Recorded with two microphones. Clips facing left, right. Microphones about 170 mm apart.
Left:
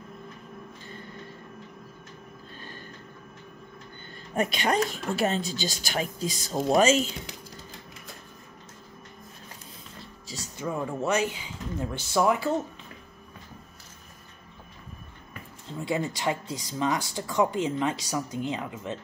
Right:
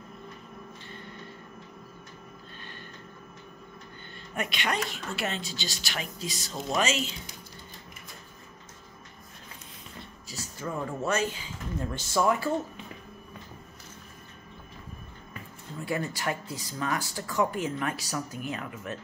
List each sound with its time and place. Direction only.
4.4 s a woman's voice: 35° left (ahead or behind)
10.3 s speech: 15° left (ahead or behind)
15.8 s speech: 20° left (ahead or behind)